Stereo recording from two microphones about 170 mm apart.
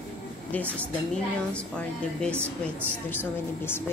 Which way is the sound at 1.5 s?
5° left (ahead or behind).